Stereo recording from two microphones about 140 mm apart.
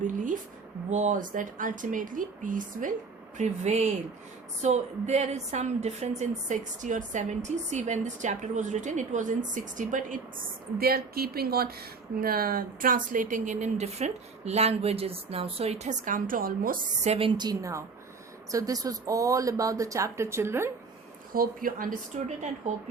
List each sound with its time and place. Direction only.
0.0 s a sound: 65° right (ahead or behind)
0.9 s speech: 55° right (ahead or behind)
3.3 s a woman's voice: 55° right (ahead or behind)
10.8 s speech: 90° right
17.0 s a woman's voice: 45° right (ahead or behind); by 20.7 s 20° right (ahead or behind)
21.3 s speech: 85° right
22.1 s a woman's voice: 55° right (ahead or behind)